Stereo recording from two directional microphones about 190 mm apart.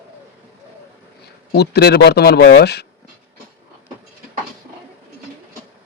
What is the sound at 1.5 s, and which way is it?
Speech, 60° left (ahead or behind).